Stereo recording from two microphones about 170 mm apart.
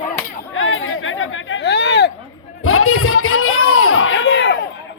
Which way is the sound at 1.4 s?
85° left.